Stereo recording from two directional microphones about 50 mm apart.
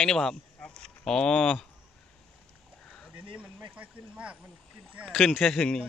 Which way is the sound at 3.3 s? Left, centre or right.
Right.